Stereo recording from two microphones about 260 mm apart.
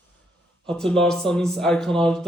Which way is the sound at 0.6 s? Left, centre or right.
Centre.